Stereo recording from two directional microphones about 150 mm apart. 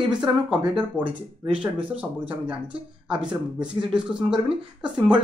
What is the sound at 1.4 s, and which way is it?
Speech, 35° right (ahead or behind).